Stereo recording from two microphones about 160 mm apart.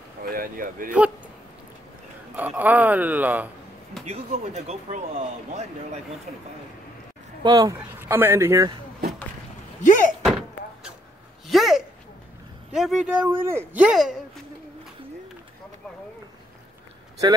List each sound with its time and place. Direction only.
0.2 s speech: 65° right (ahead or behind)
2.3 s speech: 10° right (ahead or behind)
4.6 s speech: 40° right (ahead or behind)
7.4 s speech: 25° right (ahead or behind)
9.8 s door: 55° left (ahead or behind)
10.2 s door: 5° right (ahead or behind)
11.4 s a sound: centre (ahead or behind)
12.7 s speech: centre (ahead or behind)